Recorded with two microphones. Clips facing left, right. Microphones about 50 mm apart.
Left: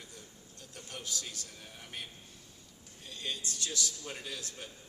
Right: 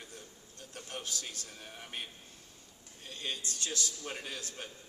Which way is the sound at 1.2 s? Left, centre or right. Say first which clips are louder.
Right 1 dB; right.